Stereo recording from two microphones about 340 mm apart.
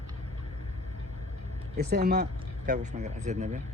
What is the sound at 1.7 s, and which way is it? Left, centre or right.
Speech, right.